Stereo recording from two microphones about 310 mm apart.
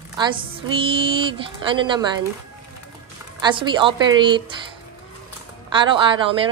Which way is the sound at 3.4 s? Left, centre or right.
Centre.